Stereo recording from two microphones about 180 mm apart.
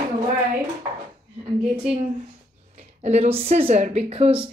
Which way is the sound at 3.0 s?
40° right (ahead or behind).